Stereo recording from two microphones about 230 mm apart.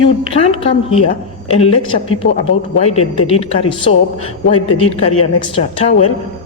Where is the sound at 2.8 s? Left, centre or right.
Left.